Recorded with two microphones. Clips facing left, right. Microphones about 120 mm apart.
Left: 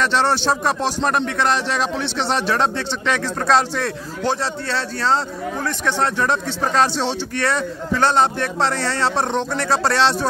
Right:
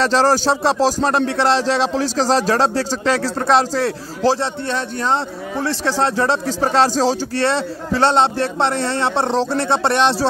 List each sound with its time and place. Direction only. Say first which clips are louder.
0.0 s a man's voice: right 3 dB; 35° right (ahead or behind); by 10.1 s 20° right (ahead or behind)